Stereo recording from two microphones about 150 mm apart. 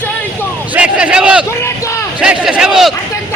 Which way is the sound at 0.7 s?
5° right (ahead or behind).